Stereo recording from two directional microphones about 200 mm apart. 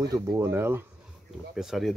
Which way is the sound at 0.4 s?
15° right (ahead or behind).